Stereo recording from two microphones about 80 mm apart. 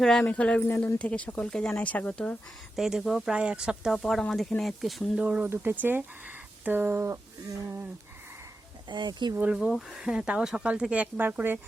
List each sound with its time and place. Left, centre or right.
0.0 s speech: centre
0.3 s speech: centre
2.7 s speech: centre
3.3 s speech: centre
3.9 s speech: centre
5.2 s speech: centre
8.9 s speech: right
9.3 s speech: centre
9.6 s speech: centre; by 11.6 s right